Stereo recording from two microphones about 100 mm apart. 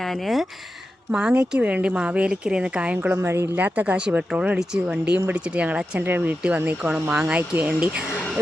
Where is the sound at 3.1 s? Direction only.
25° right (ahead or behind).